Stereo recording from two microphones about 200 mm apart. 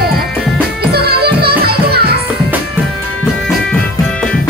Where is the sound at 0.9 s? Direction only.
50° right (ahead or behind).